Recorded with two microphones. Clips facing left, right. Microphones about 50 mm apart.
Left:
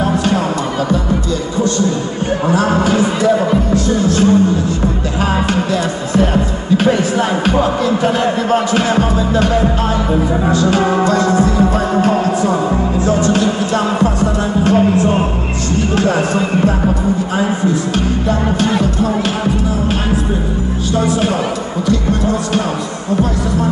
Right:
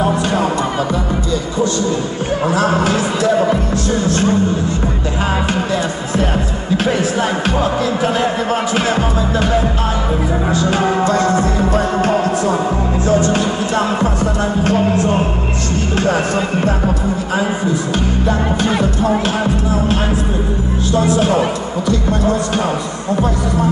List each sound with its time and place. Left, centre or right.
2.4 s music: centre
3.7 s music: right
6.1 s music: centre
10.5 s music: centre
11.1 s music: right
13.3 s music: right